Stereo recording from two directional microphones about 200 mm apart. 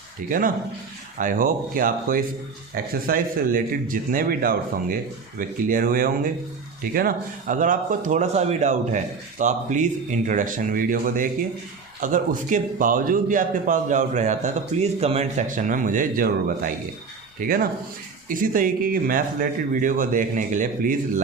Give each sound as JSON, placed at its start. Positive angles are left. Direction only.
{"t": 0.3, "sound": "a man's voice", "side_deg": -45}